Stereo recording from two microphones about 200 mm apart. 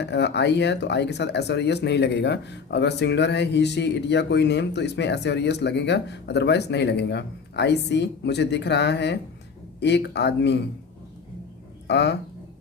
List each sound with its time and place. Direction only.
0.0 s speech: 60° left (ahead or behind)
11.9 s speech: 60° left (ahead or behind)